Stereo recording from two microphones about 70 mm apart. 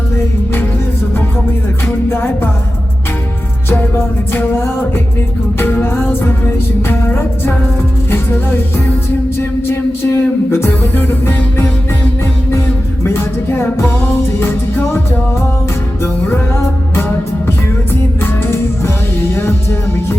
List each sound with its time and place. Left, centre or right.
2.0 s music: left
3.7 s music: left
5.8 s music: left
16.9 s music: left